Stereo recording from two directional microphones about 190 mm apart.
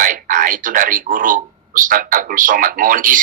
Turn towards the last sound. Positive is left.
turn(degrees=-45)  # may be behind; listen again after turning